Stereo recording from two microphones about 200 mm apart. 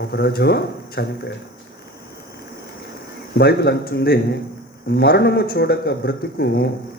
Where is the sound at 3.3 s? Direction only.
50° left (ahead or behind).